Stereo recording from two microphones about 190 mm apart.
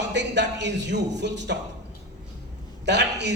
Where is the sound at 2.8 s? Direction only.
65° right (ahead or behind).